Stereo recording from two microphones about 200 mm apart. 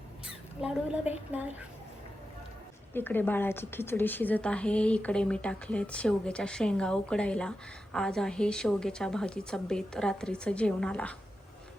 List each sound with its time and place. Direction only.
0.6 s a woman's voice: 5° right (ahead or behind)
2.9 s speech: 10° left (ahead or behind)